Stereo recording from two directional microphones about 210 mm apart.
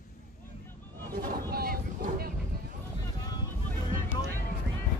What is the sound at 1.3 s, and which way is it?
Boat, 45° right (ahead or behind).